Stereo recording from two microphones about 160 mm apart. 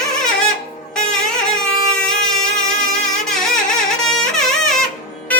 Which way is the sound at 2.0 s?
5° left (ahead or behind).